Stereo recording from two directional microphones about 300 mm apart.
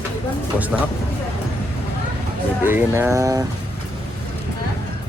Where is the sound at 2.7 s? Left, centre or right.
Centre.